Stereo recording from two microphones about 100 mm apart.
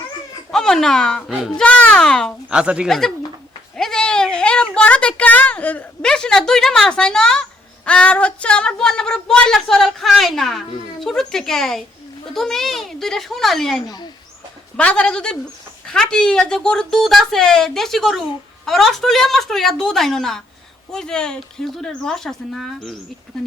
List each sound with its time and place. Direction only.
0.5 s a child's voice: 5° left (ahead or behind)
2.5 s speech: 10° right (ahead or behind)
3.8 s speech: 5° left (ahead or behind)
13.8 s speech: 45° left (ahead or behind)
14.8 s speech: 10° left (ahead or behind)